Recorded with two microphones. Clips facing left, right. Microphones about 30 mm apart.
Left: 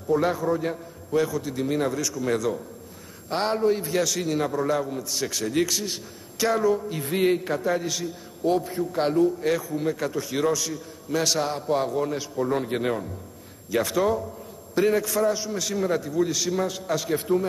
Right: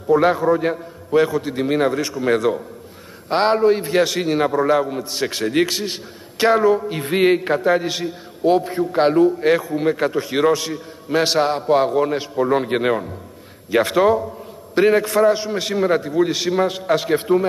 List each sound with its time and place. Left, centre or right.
0.1 s a man's voice: right